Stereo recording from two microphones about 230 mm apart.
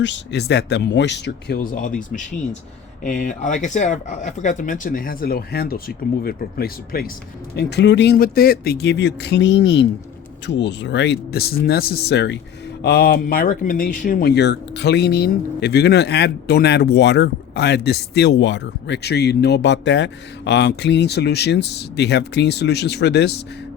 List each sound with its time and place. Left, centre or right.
0.0 s speech: left